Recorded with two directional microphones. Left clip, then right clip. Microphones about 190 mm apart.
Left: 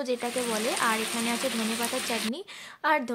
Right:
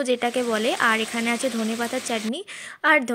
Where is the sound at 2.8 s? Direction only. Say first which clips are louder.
Right 7 dB; 20° right (ahead or behind).